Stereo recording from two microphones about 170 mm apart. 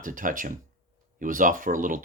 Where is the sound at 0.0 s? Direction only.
50° right (ahead or behind).